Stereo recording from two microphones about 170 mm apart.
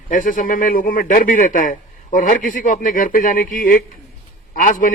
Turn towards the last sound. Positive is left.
turn(degrees=50)  # may be behind; listen again after turning